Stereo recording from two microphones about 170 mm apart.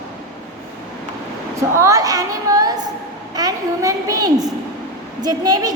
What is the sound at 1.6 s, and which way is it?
A woman's voice, 20° right (ahead or behind).